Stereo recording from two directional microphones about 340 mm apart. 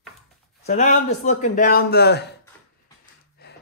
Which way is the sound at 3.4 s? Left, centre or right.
Left.